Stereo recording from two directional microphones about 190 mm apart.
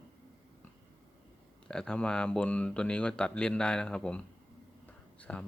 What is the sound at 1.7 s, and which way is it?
Speech, 5° left (ahead or behind).